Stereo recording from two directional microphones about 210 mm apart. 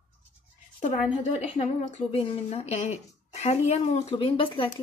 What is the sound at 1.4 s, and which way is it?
A woman's voice, 30° left (ahead or behind).